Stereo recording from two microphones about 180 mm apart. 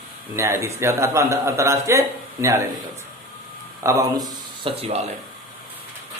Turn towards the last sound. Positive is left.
turn(degrees=-30)  # may be behind; listen again after turning